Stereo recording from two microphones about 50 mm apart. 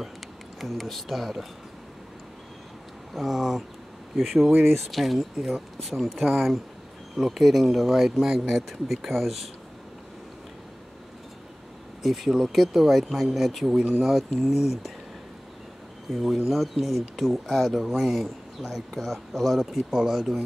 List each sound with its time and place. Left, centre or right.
0.6 s speech: centre
3.1 s speech: centre
12.0 s speech: centre
16.1 s speech: centre